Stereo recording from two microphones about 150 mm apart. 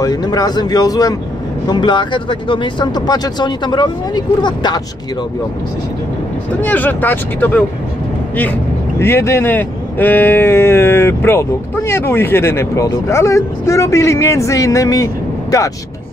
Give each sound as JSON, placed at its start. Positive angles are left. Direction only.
{"t": 0.0, "sound": "speech", "side_deg": 25}
{"t": 6.6, "sound": "speech", "side_deg": 10}
{"t": 9.0, "sound": "speech", "side_deg": 15}